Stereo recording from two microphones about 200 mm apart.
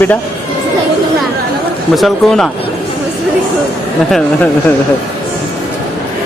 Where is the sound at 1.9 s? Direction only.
Centre (ahead or behind).